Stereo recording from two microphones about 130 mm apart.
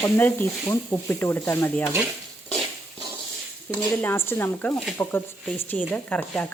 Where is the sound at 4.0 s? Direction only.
15° left (ahead or behind).